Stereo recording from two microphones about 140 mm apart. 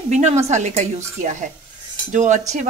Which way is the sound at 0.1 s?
50° right (ahead or behind).